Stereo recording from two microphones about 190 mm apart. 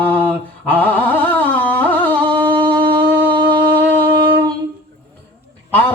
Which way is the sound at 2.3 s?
25° right (ahead or behind).